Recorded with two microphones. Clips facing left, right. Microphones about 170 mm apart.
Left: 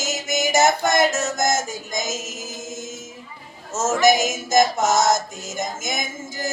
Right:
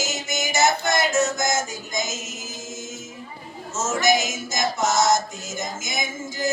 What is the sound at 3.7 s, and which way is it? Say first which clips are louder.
Speech: left 4 dB; 50° left (ahead or behind).